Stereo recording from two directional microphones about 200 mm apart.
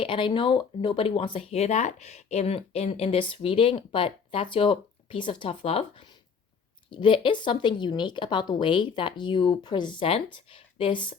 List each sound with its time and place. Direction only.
0.0 s speech: 25° left (ahead or behind)